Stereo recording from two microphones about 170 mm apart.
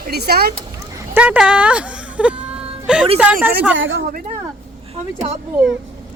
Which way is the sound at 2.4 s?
5° right (ahead or behind).